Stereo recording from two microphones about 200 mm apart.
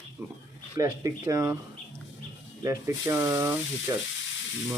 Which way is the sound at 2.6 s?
15° right (ahead or behind).